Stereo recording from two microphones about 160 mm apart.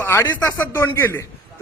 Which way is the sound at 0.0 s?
15° left (ahead or behind).